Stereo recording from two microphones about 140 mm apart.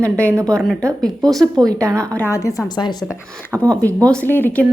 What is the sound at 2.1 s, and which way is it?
Speech, 20° left (ahead or behind).